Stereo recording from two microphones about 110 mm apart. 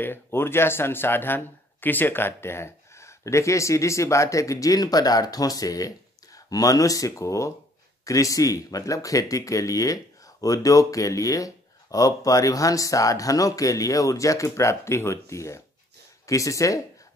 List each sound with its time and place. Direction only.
0.0 s speech: 20° left (ahead or behind)